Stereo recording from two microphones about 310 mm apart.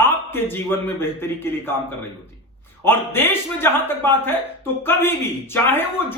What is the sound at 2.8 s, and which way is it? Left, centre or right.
Speech, centre.